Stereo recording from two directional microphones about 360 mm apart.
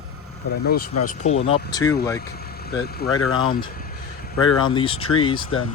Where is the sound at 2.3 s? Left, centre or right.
Left.